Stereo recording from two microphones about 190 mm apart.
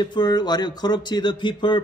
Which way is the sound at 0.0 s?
20° left (ahead or behind).